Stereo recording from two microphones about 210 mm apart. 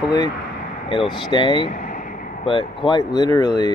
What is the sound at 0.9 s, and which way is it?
Speech, 25° left (ahead or behind).